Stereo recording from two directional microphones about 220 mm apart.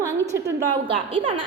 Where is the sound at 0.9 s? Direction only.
25° right (ahead or behind).